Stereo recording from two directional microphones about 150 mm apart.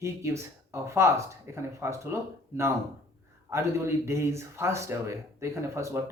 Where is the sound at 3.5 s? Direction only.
20° right (ahead or behind).